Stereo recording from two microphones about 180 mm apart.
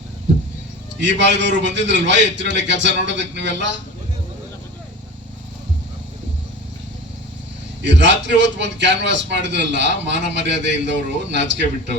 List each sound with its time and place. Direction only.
0.9 s a man's voice: 75° right (ahead or behind)
7.8 s a man's voice: 75° right (ahead or behind)